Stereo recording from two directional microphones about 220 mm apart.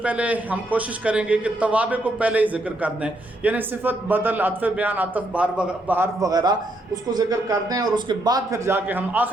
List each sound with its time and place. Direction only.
0.0 s a man's voice: 5° right (ahead or behind)